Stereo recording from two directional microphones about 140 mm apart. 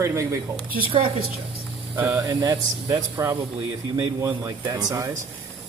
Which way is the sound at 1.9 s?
10° right (ahead or behind).